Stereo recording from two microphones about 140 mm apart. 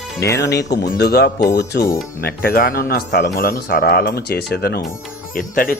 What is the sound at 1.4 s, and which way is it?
Speech, 25° left (ahead or behind).